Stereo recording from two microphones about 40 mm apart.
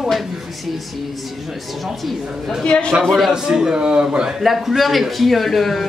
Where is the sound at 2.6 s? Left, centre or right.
Left.